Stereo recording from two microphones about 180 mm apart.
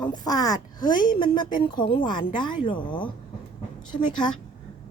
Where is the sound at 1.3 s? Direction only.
50° left (ahead or behind).